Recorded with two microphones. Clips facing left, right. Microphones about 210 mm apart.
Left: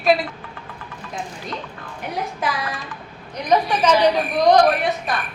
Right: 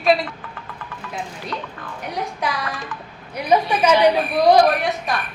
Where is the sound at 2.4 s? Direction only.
Centre (ahead or behind).